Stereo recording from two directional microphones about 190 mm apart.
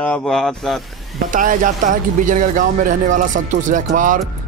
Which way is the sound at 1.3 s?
45° right (ahead or behind).